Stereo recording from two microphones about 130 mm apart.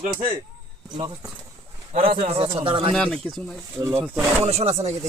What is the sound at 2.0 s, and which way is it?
Speech, 45° right (ahead or behind).